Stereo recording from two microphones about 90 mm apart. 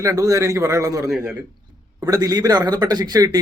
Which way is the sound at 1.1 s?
10° right (ahead or behind).